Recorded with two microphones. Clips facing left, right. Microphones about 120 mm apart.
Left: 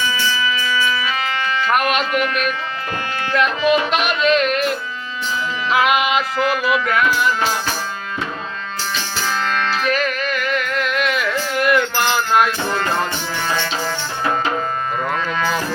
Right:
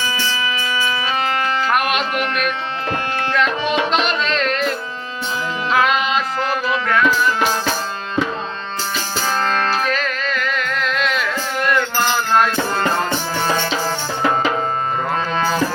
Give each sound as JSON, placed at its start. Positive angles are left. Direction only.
{"t": 0.0, "sound": "music", "side_deg": -35}
{"t": 1.7, "sound": "music", "side_deg": 0}
{"t": 2.1, "sound": "speech", "side_deg": -40}
{"t": 3.3, "sound": "music", "side_deg": 5}
{"t": 5.7, "sound": "music", "side_deg": 10}
{"t": 9.2, "sound": "music", "side_deg": -35}
{"t": 9.9, "sound": "music", "side_deg": 5}
{"t": 13.4, "sound": "music", "side_deg": -35}
{"t": 15.3, "sound": "a sound", "side_deg": -30}